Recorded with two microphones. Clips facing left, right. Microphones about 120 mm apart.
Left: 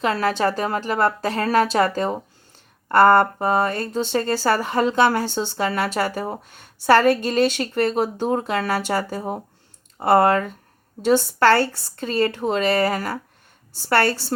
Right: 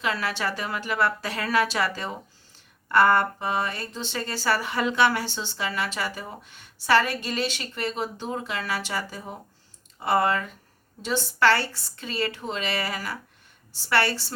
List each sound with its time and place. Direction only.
0.0 s a woman's voice: 40° left (ahead or behind)